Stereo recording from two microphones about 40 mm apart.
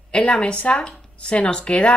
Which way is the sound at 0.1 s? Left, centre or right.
Left.